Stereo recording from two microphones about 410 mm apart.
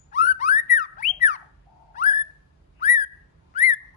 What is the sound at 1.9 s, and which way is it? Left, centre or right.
Bird, centre.